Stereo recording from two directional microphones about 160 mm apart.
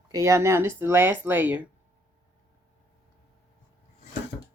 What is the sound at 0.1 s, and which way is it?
Speech, 20° right (ahead or behind).